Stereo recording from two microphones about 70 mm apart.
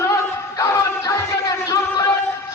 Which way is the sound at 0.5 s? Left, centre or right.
Left.